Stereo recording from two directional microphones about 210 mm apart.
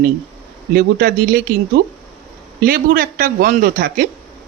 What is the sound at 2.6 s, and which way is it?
Speech, 45° right (ahead or behind).